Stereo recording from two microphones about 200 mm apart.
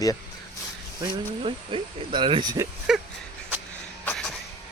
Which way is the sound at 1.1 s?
25° right (ahead or behind).